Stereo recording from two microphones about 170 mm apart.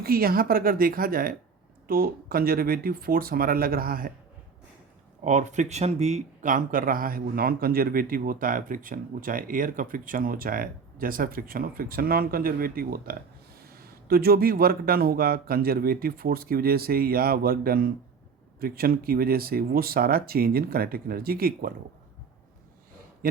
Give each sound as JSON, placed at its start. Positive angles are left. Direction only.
{"t": 0.0, "sound": "speech", "side_deg": -60}
{"t": 5.2, "sound": "speech", "side_deg": -45}
{"t": 23.2, "sound": "speech", "side_deg": -55}